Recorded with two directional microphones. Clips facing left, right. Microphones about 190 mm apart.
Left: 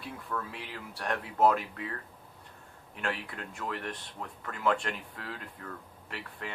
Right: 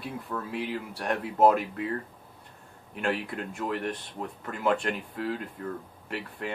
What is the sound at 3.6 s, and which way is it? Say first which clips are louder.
Speech: right 5 dB; 25° right (ahead or behind).